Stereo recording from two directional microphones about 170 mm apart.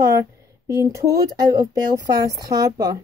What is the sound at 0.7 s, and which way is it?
Speech, 20° right (ahead or behind).